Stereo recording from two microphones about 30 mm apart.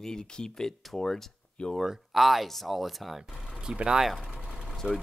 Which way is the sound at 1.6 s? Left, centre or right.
Left.